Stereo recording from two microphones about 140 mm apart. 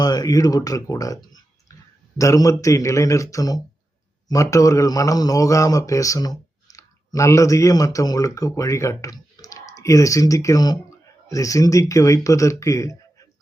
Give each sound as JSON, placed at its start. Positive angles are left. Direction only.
{"t": 0.0, "sound": "speech", "side_deg": 30}